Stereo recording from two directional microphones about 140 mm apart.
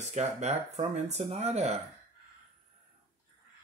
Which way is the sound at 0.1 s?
55° right (ahead or behind).